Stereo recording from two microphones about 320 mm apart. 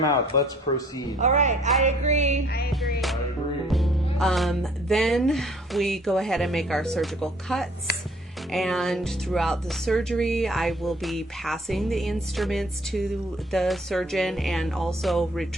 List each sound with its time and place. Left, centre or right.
0.0 s a man's voice: centre
1.2 s music: right
3.7 s speech: centre